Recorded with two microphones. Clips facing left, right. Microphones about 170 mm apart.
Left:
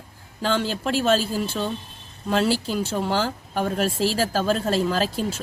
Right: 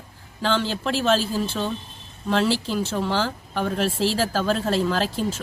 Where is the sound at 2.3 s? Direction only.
15° left (ahead or behind).